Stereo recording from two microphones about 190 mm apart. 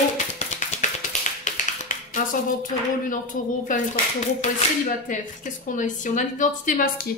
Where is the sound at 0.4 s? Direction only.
40° left (ahead or behind).